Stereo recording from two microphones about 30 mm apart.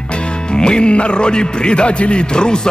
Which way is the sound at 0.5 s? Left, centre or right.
Left.